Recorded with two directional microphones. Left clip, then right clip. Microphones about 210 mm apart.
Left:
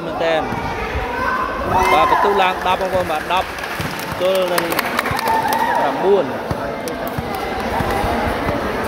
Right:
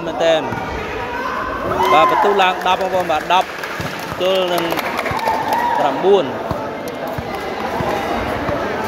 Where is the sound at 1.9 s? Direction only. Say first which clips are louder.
Right 3 dB; 10° right (ahead or behind).